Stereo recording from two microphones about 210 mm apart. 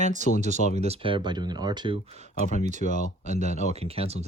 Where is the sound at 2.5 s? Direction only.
35° right (ahead or behind).